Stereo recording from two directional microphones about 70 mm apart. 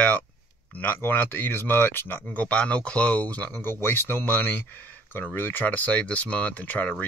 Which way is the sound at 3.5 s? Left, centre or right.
Left.